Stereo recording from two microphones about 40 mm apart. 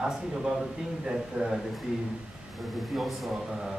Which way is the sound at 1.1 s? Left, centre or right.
Centre.